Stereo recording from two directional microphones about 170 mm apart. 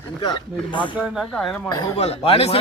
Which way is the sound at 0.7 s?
30° left (ahead or behind).